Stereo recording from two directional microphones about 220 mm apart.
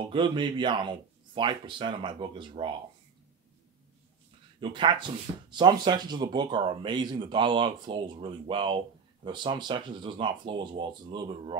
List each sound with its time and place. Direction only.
0.0 s speech: 20° right (ahead or behind)
4.6 s speech: 20° right (ahead or behind)